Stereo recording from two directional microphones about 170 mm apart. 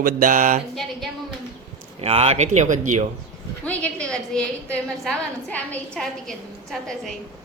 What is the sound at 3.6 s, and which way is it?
A woman's voice, 5° left (ahead or behind).